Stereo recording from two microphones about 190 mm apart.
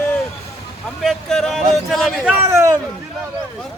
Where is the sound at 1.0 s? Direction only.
Centre (ahead or behind); by 2.7 s 15° right (ahead or behind).